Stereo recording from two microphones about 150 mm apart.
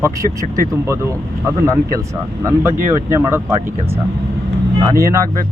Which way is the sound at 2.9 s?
15° right (ahead or behind).